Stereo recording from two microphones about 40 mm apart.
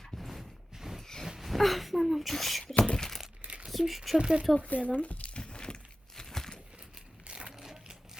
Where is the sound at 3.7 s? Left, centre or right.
Centre.